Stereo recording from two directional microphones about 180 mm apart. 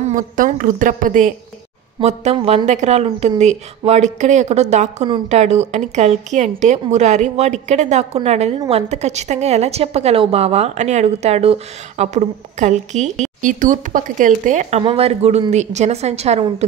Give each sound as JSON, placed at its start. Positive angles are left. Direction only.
{"t": 0.0, "sound": "a woman's voice", "side_deg": -50}
{"t": 2.0, "sound": "speech", "side_deg": -35}